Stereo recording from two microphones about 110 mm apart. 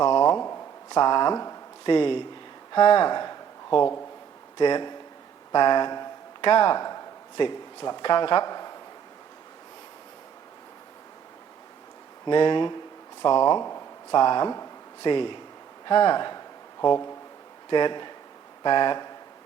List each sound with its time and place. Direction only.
0.9 s speech: 45° left (ahead or behind)
5.5 s a sound: 40° left (ahead or behind)
6.5 s speech: 50° left (ahead or behind)
6.8 s speech: 40° left (ahead or behind)
12.2 s speech: 50° left (ahead or behind)
17.7 s speech: 45° left (ahead or behind)